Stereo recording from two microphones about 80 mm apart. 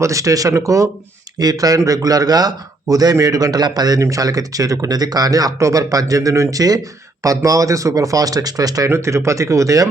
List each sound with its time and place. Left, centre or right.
0.0 s speech: right
1.4 s speech: right